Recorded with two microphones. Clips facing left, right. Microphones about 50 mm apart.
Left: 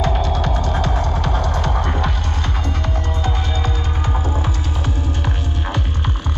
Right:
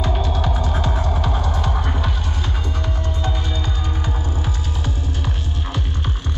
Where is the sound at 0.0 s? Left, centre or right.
Centre.